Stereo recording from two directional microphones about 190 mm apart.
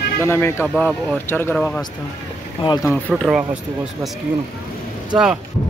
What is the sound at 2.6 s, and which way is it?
Speech, 20° left (ahead or behind).